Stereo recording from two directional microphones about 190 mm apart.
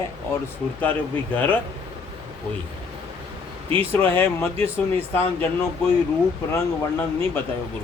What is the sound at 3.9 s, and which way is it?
A man's voice, 10° left (ahead or behind).